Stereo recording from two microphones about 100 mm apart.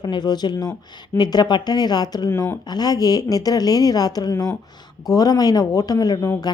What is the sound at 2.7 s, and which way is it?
A woman's voice, 40° left (ahead or behind).